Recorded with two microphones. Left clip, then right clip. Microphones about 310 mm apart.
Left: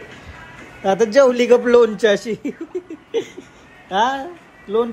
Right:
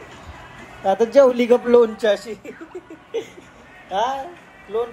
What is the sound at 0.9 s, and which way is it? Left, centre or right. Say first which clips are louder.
Speech: left 1 dB; left.